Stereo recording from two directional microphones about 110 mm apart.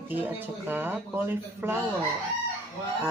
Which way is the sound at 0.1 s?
15° right (ahead or behind).